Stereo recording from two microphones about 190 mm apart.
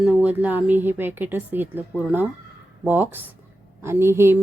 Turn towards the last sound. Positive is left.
turn(degrees=-15)  # may be behind; listen again after turning